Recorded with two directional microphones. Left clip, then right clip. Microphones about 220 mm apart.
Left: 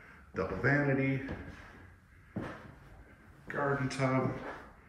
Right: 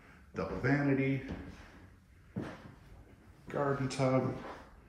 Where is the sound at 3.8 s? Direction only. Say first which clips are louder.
Right 1 dB; 15° right (ahead or behind).